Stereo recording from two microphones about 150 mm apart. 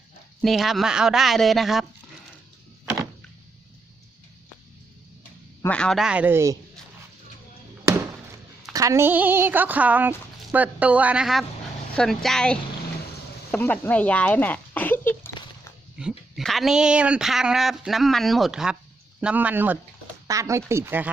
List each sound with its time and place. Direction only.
0.4 s speech: centre (ahead or behind)
5.6 s speech: 5° left (ahead or behind); by 6.6 s 20° right (ahead or behind)
8.7 s speech: 20° right (ahead or behind); by 15.3 s 15° left (ahead or behind)
16.0 s speech: centre (ahead or behind)